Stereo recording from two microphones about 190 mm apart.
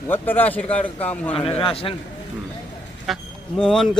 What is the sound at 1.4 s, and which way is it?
Speech, 30° left (ahead or behind).